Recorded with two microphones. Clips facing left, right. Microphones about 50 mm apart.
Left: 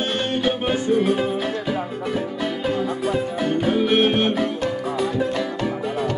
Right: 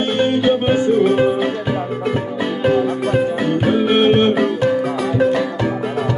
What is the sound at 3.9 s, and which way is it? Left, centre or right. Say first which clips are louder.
Music: right 7 dB; right.